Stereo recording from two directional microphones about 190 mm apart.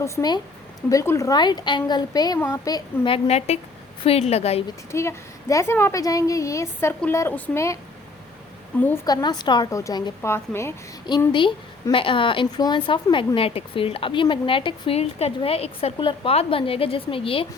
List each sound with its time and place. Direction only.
0.0 s a woman's voice: 20° left (ahead or behind)
4.9 s a woman's voice: 15° left (ahead or behind)
9.0 s a woman's voice: 20° left (ahead or behind)